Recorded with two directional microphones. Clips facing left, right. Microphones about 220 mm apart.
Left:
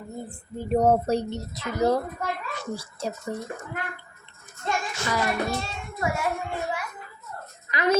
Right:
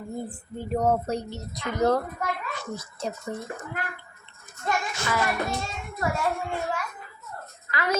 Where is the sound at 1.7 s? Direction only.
10° left (ahead or behind).